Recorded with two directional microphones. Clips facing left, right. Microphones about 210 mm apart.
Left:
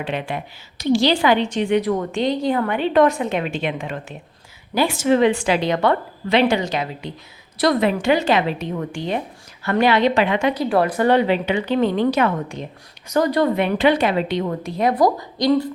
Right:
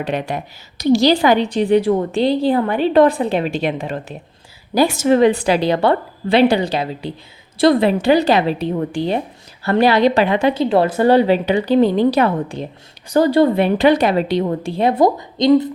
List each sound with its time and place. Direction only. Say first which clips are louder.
0.0 s a woman's voice: right 4 dB; 45° right (ahead or behind); by 15.7 s 20° right (ahead or behind)